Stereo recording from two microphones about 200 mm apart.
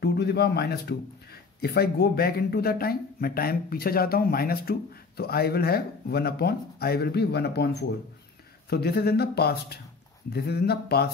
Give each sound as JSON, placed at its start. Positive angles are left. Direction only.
{"t": 0.0, "sound": "speech", "side_deg": 55}